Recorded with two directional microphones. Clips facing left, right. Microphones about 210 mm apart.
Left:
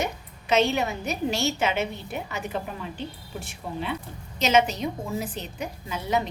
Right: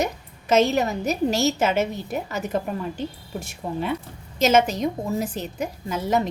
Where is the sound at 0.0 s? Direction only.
40° right (ahead or behind).